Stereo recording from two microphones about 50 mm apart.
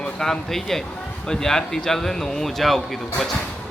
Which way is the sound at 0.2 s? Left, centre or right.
Centre.